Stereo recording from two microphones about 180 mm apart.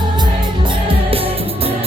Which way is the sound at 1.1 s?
30° right (ahead or behind).